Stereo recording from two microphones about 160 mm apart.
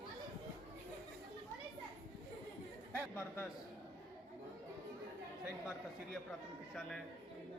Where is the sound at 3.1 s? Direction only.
15° left (ahead or behind).